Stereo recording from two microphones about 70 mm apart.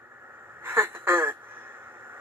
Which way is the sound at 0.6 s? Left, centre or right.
Right.